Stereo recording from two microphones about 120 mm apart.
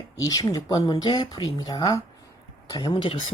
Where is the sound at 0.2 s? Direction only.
35° left (ahead or behind).